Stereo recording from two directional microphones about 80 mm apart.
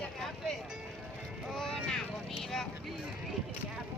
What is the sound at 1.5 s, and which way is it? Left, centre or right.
Vehicle, centre.